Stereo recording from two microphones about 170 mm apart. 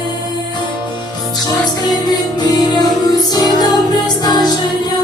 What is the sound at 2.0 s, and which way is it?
Music, 25° left (ahead or behind).